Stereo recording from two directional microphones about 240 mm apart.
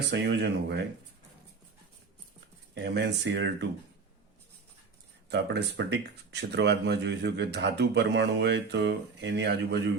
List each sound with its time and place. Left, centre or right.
0.1 s speech: right
2.7 s speech: right
5.3 s speech: right